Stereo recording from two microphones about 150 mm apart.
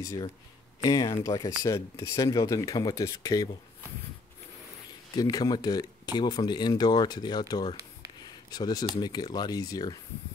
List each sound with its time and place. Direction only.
0.0 s speech: 20° left (ahead or behind)
5.1 s speech: 25° left (ahead or behind)